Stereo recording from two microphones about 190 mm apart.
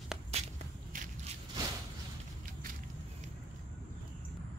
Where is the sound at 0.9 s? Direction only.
45° right (ahead or behind).